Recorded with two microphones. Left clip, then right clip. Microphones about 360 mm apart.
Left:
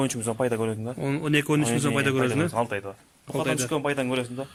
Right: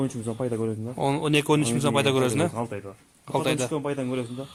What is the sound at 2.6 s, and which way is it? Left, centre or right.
Speech, left.